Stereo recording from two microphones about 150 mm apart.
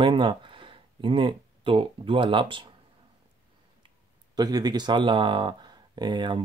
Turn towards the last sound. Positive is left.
turn(degrees=-30)  # may be behind; listen again after turning